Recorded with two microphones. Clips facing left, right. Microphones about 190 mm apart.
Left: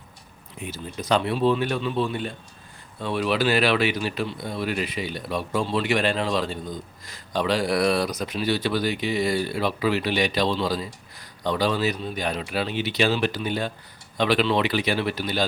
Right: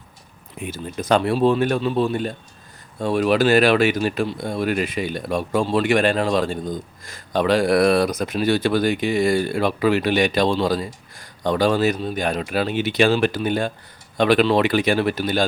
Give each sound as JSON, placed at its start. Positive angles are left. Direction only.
{"t": 0.6, "sound": "speech", "side_deg": -50}